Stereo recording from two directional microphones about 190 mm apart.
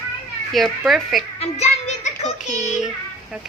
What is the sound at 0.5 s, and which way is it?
Speech, centre (ahead or behind).